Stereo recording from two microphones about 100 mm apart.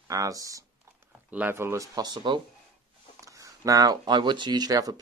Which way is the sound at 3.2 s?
35° right (ahead or behind).